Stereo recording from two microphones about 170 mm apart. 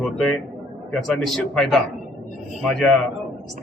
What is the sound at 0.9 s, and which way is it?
A man's voice, centre (ahead or behind).